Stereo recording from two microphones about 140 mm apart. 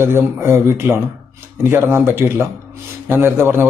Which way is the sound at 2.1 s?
15° right (ahead or behind).